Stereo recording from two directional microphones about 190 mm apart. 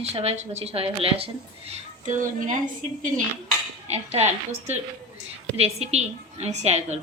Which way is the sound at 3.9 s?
35° right (ahead or behind).